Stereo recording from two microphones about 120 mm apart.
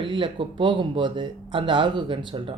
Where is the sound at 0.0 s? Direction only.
45° right (ahead or behind).